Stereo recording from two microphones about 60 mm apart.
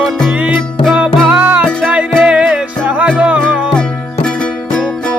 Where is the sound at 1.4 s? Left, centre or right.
Right.